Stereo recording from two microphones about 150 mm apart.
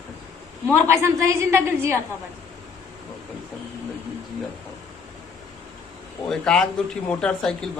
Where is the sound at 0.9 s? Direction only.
15° right (ahead or behind).